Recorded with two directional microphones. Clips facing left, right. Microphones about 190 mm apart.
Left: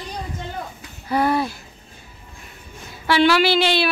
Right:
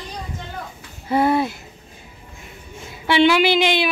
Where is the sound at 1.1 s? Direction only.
25° right (ahead or behind).